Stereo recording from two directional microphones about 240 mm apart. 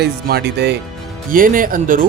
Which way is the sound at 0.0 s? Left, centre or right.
Right.